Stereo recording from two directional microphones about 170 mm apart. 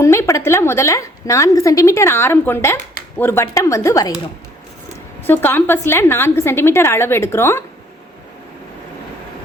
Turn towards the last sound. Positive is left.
turn(degrees=15)  # may be behind; listen again after turning